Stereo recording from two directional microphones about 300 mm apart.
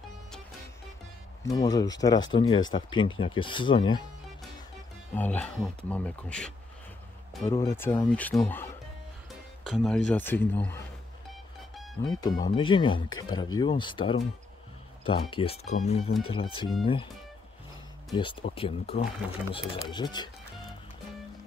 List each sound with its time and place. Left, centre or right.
1.4 s speech: centre
5.1 s speech: centre
11.2 s music: centre
12.1 s speech: centre
18.1 s speech: centre